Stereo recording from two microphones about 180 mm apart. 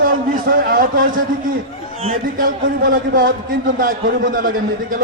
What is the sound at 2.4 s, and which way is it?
A man's voice, 50° right (ahead or behind).